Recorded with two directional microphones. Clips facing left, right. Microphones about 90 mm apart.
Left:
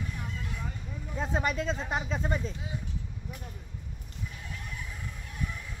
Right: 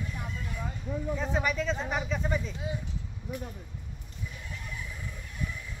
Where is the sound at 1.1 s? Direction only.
35° left (ahead or behind).